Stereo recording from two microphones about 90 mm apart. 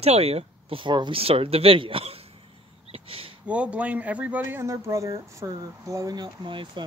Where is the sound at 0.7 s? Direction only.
60° right (ahead or behind); by 2.2 s 90° right.